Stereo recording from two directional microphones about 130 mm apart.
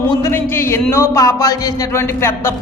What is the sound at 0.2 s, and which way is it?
A man's voice, 15° left (ahead or behind).